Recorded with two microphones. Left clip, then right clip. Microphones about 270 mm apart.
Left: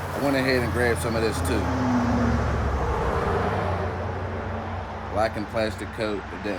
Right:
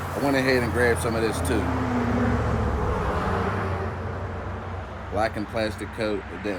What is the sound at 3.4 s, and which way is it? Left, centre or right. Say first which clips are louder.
Vehicle: left 2 dB; left.